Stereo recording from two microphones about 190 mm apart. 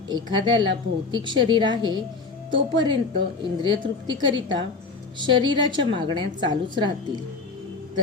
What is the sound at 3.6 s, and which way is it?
A woman's voice, 25° right (ahead or behind).